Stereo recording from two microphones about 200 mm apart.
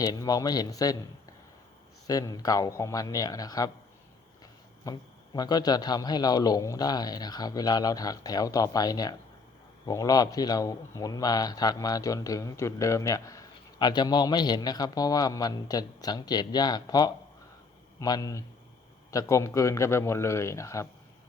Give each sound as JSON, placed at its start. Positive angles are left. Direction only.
{"t": 0.0, "sound": "a man's voice", "side_deg": 20}
{"t": 2.0, "sound": "a man's voice", "side_deg": 20}
{"t": 4.9, "sound": "a man's voice", "side_deg": 20}